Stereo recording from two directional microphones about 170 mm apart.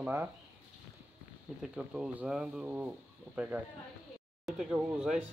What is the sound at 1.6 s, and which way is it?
Speech, 5° right (ahead or behind).